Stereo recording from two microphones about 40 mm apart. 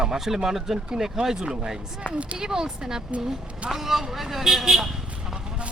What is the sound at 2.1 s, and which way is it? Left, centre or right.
Speech, right.